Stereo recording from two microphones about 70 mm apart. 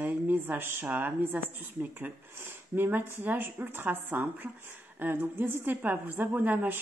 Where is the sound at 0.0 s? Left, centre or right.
Right.